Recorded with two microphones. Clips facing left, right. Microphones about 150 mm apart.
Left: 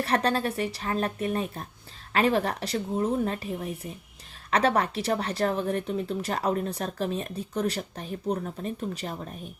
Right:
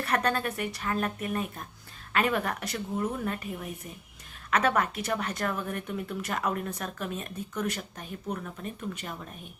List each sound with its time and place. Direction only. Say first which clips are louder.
0.0 s speech: left 3 dB; 30° left (ahead or behind)